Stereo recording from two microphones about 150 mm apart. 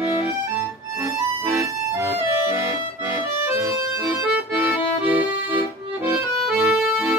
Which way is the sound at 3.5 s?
20° right (ahead or behind).